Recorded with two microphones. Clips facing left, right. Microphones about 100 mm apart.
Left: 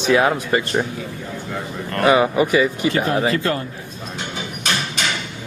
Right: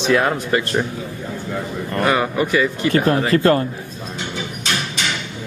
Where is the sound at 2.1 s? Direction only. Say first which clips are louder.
Left 4 dB; 15° left (ahead or behind).